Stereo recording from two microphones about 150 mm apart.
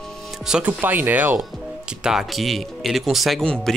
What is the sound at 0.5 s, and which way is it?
Speech, 10° right (ahead or behind).